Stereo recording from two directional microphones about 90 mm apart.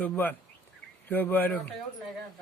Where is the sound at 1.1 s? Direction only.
20° left (ahead or behind).